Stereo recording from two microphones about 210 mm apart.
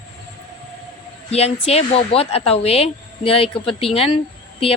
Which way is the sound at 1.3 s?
30° left (ahead or behind).